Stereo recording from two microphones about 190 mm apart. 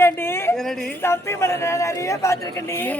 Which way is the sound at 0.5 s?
Centre (ahead or behind).